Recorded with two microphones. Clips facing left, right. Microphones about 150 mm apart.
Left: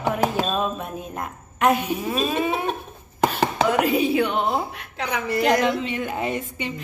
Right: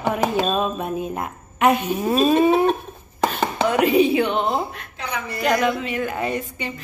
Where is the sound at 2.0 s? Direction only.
40° right (ahead or behind).